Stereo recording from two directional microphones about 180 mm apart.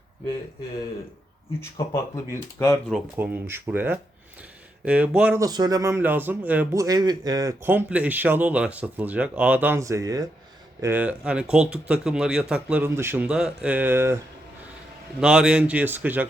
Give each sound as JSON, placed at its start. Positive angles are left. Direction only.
{"t": 1.9, "sound": "speech", "side_deg": 15}
{"t": 2.9, "sound": "speech", "side_deg": -10}
{"t": 5.4, "sound": "speech", "side_deg": -20}
{"t": 6.8, "sound": "speech", "side_deg": -20}
{"t": 15.2, "sound": "speech", "side_deg": -5}